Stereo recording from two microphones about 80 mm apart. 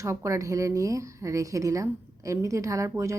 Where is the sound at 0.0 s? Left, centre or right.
Right.